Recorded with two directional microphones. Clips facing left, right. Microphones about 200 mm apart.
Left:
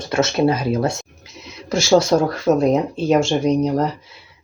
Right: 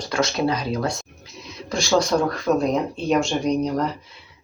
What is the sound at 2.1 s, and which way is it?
Speech, 30° left (ahead or behind).